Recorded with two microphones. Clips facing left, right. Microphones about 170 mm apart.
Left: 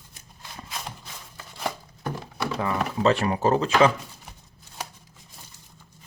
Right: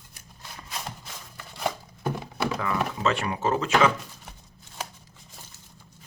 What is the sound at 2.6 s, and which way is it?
Speech, 35° left (ahead or behind).